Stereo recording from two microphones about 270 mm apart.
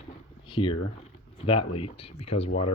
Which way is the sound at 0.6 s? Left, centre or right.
Centre.